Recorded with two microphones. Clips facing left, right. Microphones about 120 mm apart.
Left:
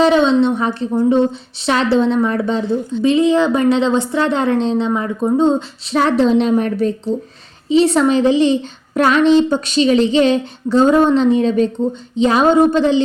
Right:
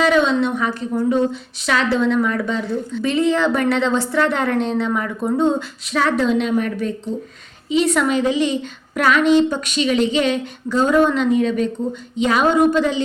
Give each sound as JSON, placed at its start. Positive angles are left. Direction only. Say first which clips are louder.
{"t": 0.0, "sound": "a woman's voice", "louder": "left 4 dB", "side_deg": 30}